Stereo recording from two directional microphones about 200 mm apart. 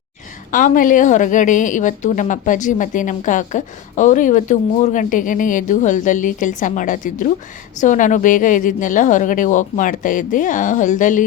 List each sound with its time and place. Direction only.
0.5 s a woman's voice: 40° left (ahead or behind)